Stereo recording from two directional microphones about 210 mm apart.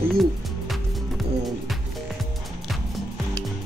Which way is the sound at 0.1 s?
Centre (ahead or behind).